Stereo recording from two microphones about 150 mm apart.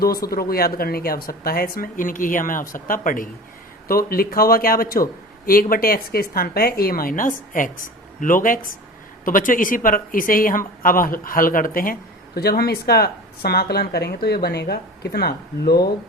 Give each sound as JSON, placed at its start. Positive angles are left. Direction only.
{"t": 0.0, "sound": "speech", "side_deg": 90}
{"t": 3.8, "sound": "a woman's voice", "side_deg": 80}